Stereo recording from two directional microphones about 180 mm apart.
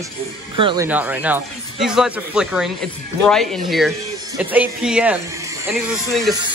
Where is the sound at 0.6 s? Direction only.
30° right (ahead or behind).